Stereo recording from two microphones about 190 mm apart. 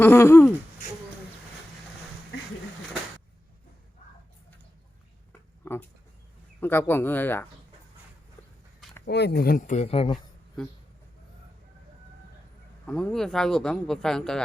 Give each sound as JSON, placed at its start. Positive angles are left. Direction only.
{"t": 0.0, "sound": "speech", "side_deg": 10}
{"t": 5.6, "sound": "speech", "side_deg": 10}
{"t": 9.0, "sound": "speech", "side_deg": 60}
{"t": 12.8, "sound": "a man's voice", "side_deg": 5}